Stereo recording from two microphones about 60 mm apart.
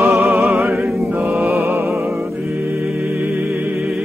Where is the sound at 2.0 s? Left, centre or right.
Right.